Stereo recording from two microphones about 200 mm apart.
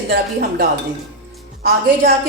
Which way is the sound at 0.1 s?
50° right (ahead or behind).